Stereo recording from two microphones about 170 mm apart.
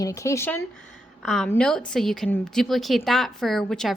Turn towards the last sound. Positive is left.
turn(degrees=5)  # may be behind; listen again after turning